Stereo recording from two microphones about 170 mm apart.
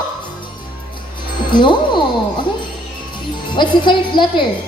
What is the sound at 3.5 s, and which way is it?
Speech, 30° left (ahead or behind).